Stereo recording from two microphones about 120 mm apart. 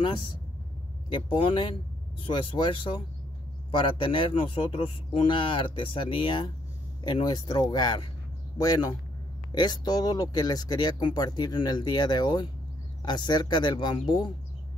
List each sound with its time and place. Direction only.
1.1 s speech: 45° left (ahead or behind)